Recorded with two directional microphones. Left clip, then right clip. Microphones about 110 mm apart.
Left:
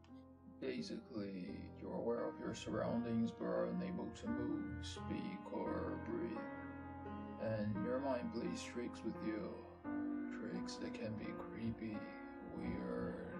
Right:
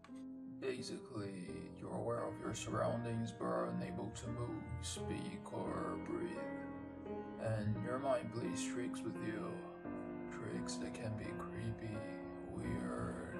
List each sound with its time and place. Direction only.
0.7 s speech: 45° left (ahead or behind)
5.1 s speech: 40° left (ahead or behind)
7.4 s speech: 45° left (ahead or behind)
10.5 s speech: 40° left (ahead or behind)
12.7 s speech: 40° left (ahead or behind)